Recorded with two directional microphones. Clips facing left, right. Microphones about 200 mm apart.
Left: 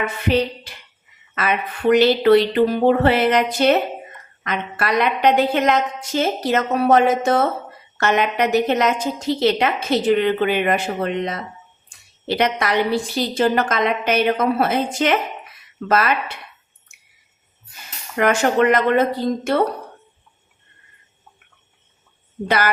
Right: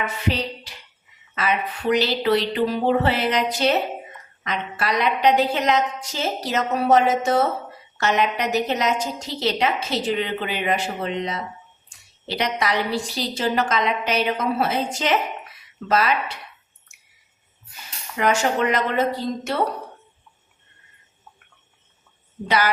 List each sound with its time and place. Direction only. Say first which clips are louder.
0.3 s a woman's voice: left 8 dB; 55° left (ahead or behind)
18.2 s a woman's voice: left 4 dB; 55° left (ahead or behind)
22.4 s a woman's voice: left 2 dB; 50° left (ahead or behind)